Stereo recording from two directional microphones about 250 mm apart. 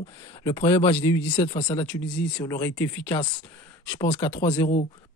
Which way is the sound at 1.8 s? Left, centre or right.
Centre.